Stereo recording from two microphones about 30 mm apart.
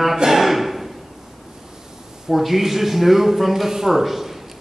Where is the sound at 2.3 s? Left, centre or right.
Centre.